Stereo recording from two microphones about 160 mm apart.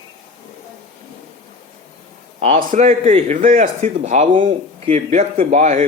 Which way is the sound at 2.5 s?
45° right (ahead or behind).